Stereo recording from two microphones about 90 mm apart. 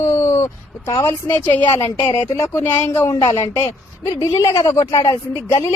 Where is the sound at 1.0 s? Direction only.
20° left (ahead or behind).